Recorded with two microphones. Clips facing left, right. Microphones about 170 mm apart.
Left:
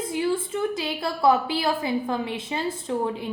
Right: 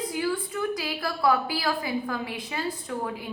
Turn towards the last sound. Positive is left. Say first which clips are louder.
# left 5 dB
turn(degrees=25)  # may be behind; listen again after turning